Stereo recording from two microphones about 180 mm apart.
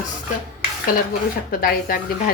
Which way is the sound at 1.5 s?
55° left (ahead or behind).